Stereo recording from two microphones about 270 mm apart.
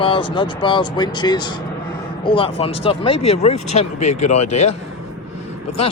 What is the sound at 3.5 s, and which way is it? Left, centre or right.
Speech, left.